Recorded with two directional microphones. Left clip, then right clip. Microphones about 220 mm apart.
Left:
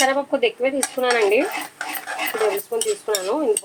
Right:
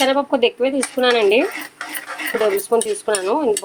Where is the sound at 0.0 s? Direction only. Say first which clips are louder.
Right 3 dB; 45° right (ahead or behind).